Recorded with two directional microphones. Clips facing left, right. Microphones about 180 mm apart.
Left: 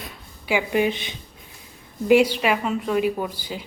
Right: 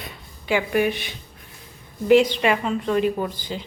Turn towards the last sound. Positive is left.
turn(degrees=10)  # may be behind; listen again after turning